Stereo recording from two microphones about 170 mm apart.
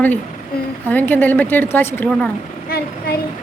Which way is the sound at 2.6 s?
65° left (ahead or behind).